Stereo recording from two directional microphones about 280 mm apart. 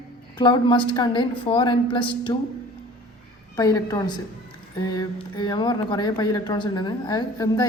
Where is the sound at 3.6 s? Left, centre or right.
Centre.